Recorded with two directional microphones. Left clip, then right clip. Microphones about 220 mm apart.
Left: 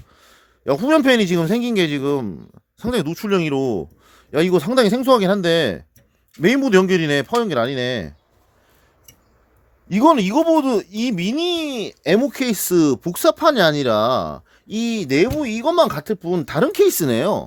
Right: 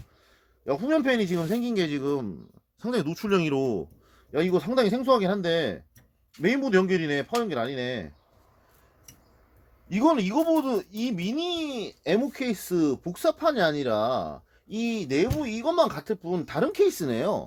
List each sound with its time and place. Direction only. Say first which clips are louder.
0.2 s speech: left 12 dB; 45° left (ahead or behind)
9.9 s speech: left 9 dB; 50° left (ahead or behind)